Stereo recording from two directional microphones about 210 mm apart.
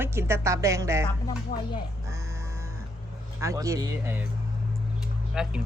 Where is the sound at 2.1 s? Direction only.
15° right (ahead or behind).